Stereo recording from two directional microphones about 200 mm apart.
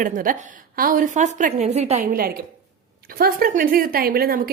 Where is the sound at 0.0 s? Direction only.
40° right (ahead or behind).